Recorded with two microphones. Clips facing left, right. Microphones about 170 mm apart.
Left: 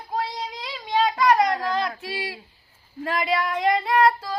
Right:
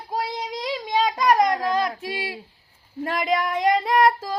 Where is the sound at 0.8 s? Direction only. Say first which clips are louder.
Left 1 dB; 15° right (ahead or behind).